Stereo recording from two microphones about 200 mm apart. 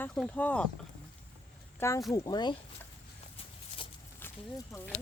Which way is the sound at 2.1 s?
20° left (ahead or behind).